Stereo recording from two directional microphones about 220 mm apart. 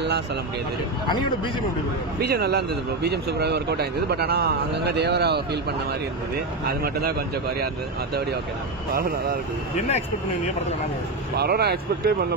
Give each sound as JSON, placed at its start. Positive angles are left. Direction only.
{"t": 1.0, "sound": "speech", "side_deg": 20}
{"t": 2.1, "sound": "speech", "side_deg": -45}
{"t": 8.9, "sound": "speech", "side_deg": -40}
{"t": 11.3, "sound": "speech", "side_deg": -45}